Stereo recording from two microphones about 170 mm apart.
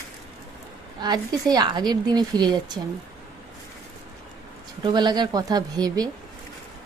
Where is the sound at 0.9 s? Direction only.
25° right (ahead or behind).